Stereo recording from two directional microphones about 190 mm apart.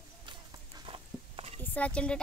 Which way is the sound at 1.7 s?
5° left (ahead or behind).